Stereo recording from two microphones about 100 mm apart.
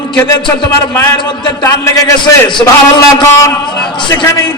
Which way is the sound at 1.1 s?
45° left (ahead or behind).